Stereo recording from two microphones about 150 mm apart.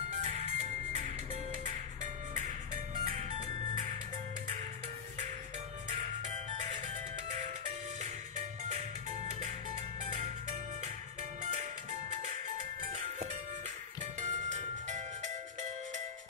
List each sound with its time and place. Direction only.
0.1 s music: 50° right (ahead or behind)
5.9 s music: 55° right (ahead or behind)
10.0 s music: 50° right (ahead or behind)
12.9 s music: 55° right (ahead or behind)